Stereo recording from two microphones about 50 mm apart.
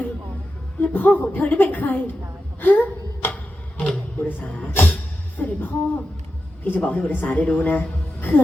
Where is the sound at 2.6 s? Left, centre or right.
Left.